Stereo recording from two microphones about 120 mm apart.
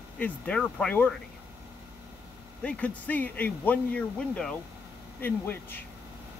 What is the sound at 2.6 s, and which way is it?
Speech, 10° left (ahead or behind).